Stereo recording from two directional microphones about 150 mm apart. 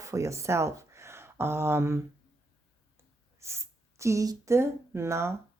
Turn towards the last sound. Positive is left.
turn(degrees=-20)  # may be behind; listen again after turning